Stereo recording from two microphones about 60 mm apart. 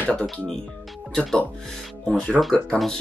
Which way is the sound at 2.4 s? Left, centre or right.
Centre.